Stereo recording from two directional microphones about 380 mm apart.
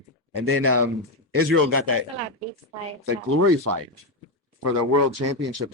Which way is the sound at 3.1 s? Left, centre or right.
Right.